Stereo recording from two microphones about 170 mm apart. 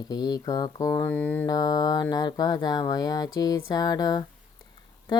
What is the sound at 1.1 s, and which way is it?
Mantra, 10° left (ahead or behind).